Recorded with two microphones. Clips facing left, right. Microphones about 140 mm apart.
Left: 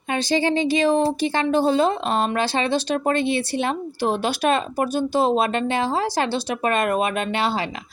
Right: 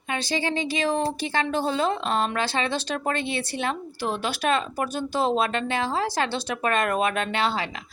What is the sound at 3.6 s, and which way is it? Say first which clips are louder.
Speech: left 5 dB; 25° left (ahead or behind).